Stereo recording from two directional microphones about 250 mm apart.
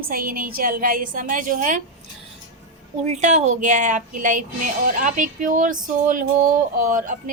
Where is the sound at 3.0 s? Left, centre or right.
Right.